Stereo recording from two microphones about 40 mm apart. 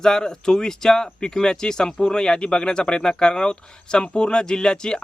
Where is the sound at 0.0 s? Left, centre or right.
Centre.